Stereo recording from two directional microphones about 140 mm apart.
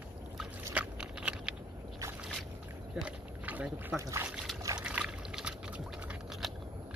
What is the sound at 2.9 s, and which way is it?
Rowboat, 10° right (ahead or behind).